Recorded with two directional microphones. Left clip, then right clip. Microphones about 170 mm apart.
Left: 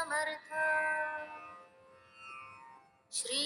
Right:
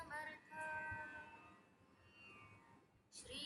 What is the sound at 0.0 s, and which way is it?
Music, 45° left (ahead or behind).